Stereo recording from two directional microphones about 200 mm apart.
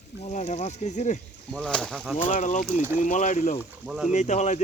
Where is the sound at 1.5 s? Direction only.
5° left (ahead or behind).